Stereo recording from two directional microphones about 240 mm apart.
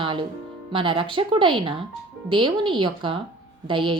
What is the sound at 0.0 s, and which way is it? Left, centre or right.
Music, right.